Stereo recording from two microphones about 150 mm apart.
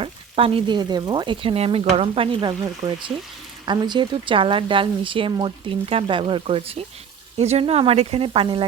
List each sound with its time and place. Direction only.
0.0 s speech: 40° right (ahead or behind)